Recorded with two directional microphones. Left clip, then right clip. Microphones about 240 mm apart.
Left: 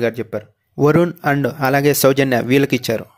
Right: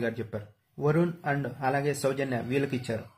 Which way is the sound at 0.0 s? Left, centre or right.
Left.